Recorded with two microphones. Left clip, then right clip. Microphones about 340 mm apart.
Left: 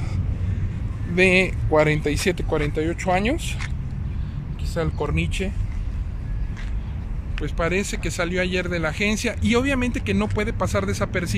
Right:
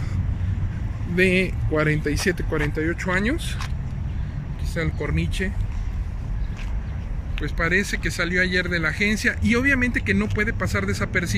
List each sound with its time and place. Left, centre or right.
1.1 s speech: centre
4.7 s speech: centre
7.3 s speech: centre